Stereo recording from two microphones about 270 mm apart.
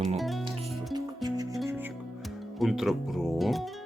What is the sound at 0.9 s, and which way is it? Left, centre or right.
Music, centre.